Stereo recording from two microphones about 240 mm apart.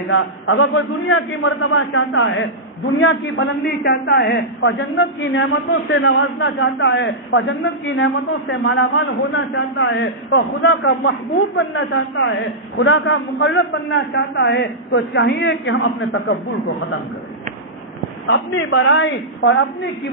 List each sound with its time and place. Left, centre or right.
0.1 s a man's voice: left
18.2 s a man's voice: left